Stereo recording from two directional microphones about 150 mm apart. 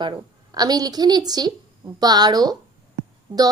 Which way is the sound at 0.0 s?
25° right (ahead or behind).